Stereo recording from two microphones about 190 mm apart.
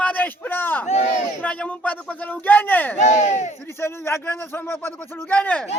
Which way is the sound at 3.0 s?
40° left (ahead or behind).